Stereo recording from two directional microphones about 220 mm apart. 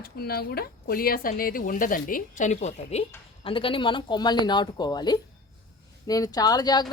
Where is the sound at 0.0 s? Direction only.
45° left (ahead or behind).